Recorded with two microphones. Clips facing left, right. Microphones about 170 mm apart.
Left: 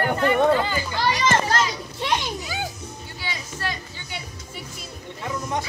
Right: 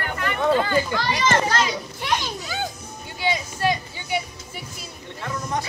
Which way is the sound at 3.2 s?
15° right (ahead or behind).